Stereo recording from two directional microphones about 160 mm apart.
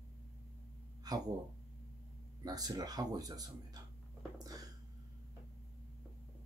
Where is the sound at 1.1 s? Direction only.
25° right (ahead or behind).